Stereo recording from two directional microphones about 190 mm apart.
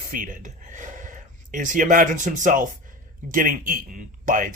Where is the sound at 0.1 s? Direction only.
45° right (ahead or behind).